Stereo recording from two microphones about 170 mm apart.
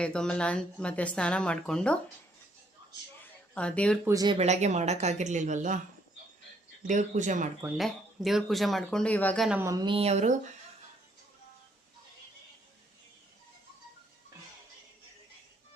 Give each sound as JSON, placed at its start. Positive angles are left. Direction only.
{"t": 0.0, "sound": "a woman's voice", "side_deg": 5}
{"t": 3.5, "sound": "a woman's voice", "side_deg": 5}
{"t": 4.0, "sound": "speech", "side_deg": -20}
{"t": 4.4, "sound": "speech", "side_deg": -40}
{"t": 6.8, "sound": "speech", "side_deg": -45}
{"t": 7.8, "sound": "speech", "side_deg": 0}
{"t": 9.5, "sound": "speech", "side_deg": -15}